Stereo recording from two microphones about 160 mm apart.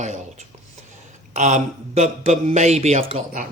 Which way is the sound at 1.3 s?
50° right (ahead or behind).